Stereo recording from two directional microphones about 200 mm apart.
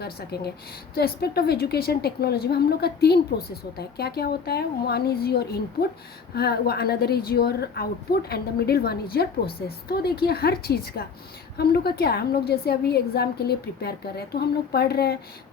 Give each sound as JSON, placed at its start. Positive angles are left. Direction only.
{"t": 0.0, "sound": "a woman's voice", "side_deg": 55}